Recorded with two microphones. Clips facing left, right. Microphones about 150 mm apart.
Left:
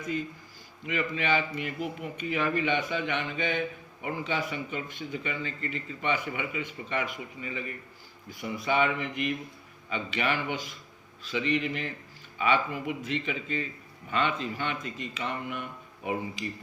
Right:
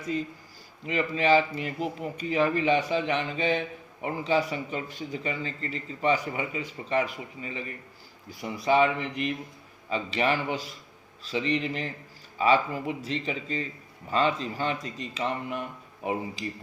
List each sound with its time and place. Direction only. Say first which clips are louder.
0.9 s speech: right 5 dB; 35° right (ahead or behind)